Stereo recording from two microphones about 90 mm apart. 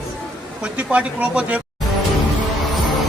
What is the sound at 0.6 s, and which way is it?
Speech, 15° right (ahead or behind).